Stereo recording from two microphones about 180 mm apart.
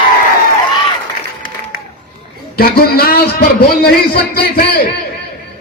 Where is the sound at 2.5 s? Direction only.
55° left (ahead or behind).